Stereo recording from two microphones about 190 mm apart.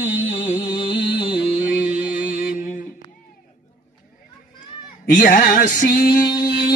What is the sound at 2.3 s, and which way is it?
Music, 50° left (ahead or behind).